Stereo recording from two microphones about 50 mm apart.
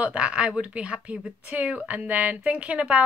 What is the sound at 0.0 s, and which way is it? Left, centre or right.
Speech, right.